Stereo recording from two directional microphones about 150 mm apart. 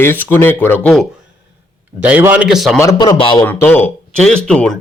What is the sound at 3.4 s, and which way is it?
Speech, 10° left (ahead or behind).